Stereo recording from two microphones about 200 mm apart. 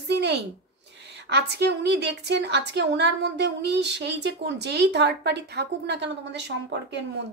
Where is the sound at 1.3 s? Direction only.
55° right (ahead or behind).